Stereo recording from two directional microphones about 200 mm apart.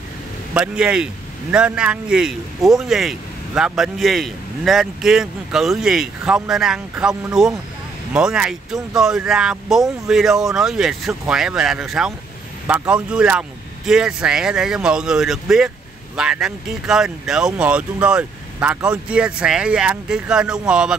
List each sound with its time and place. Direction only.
0.6 s a man's voice: 5° right (ahead or behind)